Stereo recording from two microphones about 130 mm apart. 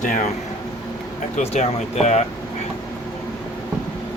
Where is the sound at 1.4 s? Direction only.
55° left (ahead or behind).